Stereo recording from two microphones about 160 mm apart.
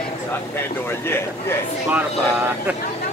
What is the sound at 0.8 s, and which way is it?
Speech, 15° left (ahead or behind).